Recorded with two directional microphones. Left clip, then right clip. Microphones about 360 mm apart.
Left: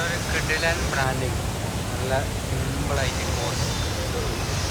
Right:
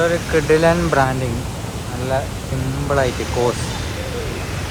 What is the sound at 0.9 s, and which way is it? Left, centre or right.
Speech, centre.